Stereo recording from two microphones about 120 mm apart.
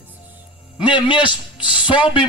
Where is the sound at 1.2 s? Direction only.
40° left (ahead or behind).